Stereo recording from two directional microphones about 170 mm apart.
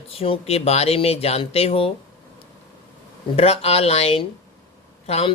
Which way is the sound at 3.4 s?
35° left (ahead or behind).